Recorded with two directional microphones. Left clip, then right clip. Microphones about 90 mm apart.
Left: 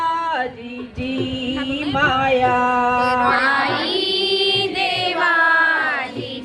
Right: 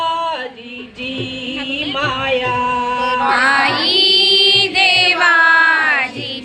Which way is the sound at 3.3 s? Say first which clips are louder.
Right 4 dB; 45° right (ahead or behind).